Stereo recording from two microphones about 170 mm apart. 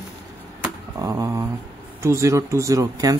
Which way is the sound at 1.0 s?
20° right (ahead or behind).